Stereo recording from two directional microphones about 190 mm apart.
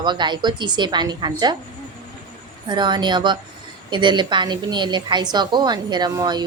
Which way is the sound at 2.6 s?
25° right (ahead or behind).